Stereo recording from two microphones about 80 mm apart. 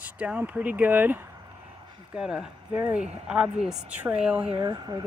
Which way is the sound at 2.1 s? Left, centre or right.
Centre.